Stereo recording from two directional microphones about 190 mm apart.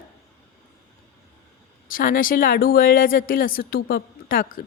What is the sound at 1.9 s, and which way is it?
A woman's voice, 50° left (ahead or behind).